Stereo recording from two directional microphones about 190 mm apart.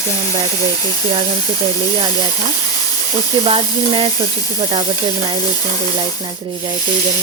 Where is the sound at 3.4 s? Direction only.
30° right (ahead or behind).